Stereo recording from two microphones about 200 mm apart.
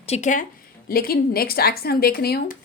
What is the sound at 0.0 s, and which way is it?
A woman's voice, 35° left (ahead or behind).